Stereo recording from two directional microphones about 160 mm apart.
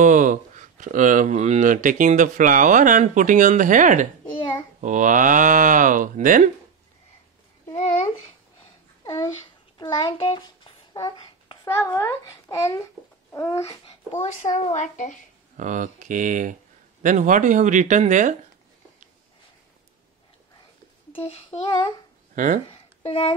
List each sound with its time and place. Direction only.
0.0 s speech: 50° right (ahead or behind)
9.0 s a child's voice: 25° left (ahead or behind)
14.2 s a woman's voice: 45° left (ahead or behind)
15.5 s speech: 50° right (ahead or behind)
21.1 s child singing: 35° left (ahead or behind)
22.3 s speech: 55° right (ahead or behind)
22.7 s a sound: 35° left (ahead or behind)